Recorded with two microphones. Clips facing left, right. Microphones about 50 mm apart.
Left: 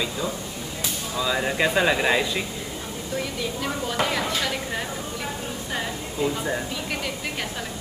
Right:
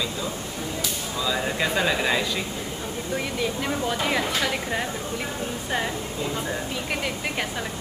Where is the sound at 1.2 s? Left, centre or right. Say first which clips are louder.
Left 2 dB; centre.